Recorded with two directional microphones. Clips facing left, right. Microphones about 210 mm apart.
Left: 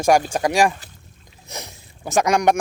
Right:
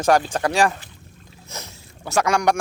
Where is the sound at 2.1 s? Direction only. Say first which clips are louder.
Left 2 dB; 20° left (ahead or behind).